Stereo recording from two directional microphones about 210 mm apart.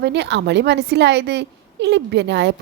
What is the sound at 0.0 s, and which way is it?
A woman's voice, 55° right (ahead or behind).